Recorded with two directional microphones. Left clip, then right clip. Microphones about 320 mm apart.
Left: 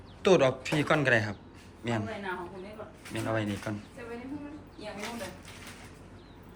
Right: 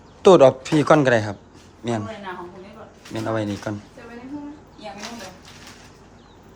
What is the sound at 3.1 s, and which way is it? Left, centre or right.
Speech, centre.